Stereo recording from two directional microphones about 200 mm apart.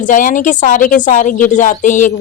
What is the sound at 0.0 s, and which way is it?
A woman's voice, 40° left (ahead or behind).